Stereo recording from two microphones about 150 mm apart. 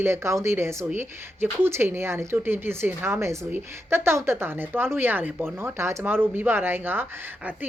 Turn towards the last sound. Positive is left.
turn(degrees=-15)  # may be behind; listen again after turning